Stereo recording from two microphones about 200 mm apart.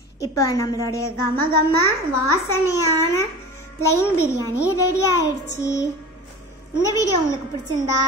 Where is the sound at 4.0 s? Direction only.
15° left (ahead or behind).